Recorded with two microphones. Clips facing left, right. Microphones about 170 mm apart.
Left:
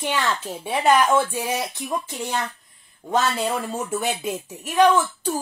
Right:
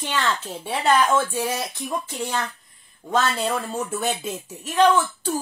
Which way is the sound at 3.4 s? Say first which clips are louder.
Even; 15° left (ahead or behind).